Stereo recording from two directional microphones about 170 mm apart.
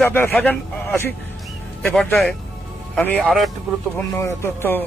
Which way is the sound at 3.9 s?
15° left (ahead or behind).